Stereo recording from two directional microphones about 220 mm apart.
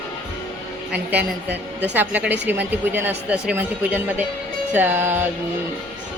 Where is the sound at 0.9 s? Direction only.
5° right (ahead or behind).